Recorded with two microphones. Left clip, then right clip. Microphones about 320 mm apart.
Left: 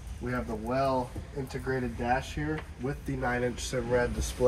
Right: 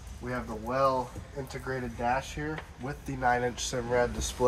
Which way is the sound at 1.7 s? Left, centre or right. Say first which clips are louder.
Left 3 dB; centre.